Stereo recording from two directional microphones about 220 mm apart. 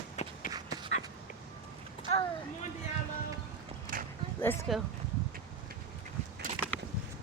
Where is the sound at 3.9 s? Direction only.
40° right (ahead or behind).